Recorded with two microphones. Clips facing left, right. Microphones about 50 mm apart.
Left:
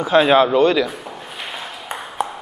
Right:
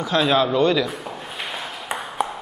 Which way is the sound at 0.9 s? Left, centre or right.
Centre.